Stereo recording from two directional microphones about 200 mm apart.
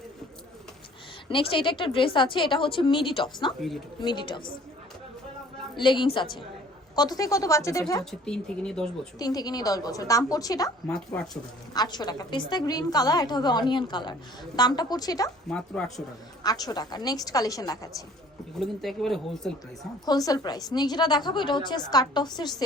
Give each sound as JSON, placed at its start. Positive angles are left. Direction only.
{"t": 1.3, "sound": "a woman's voice", "side_deg": 25}
{"t": 5.7, "sound": "a woman's voice", "side_deg": 25}
{"t": 8.2, "sound": "speech", "side_deg": 5}
{"t": 9.1, "sound": "a woman's voice", "side_deg": 20}
{"t": 10.8, "sound": "speech", "side_deg": 5}
{"t": 11.7, "sound": "a woman's voice", "side_deg": 20}
{"t": 15.4, "sound": "speech", "side_deg": 5}
{"t": 16.4, "sound": "a woman's voice", "side_deg": 20}
{"t": 18.6, "sound": "speech", "side_deg": 0}
{"t": 20.1, "sound": "a woman's voice", "side_deg": 20}